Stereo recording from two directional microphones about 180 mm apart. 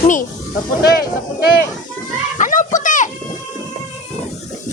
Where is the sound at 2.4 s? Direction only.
45° left (ahead or behind).